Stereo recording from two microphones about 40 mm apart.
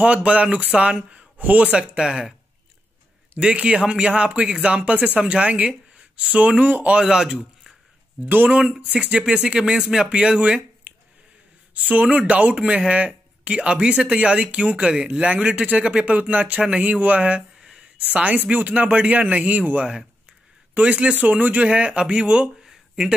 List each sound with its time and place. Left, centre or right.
0.0 s speech: right
1.4 s speech: right
2.0 s speech: centre
3.3 s speech: right; by 7.7 s centre
8.3 s speech: right
8.9 s speech: right
17.6 s a sound: centre
18.1 s speech: right
22.6 s a sound: centre